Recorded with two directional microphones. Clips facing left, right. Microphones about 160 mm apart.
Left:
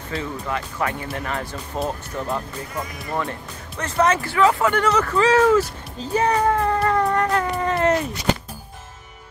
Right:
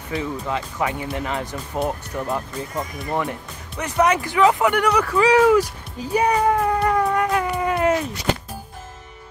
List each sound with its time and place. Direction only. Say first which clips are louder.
0.1 s speech: right 2 dB; 15° right (ahead or behind)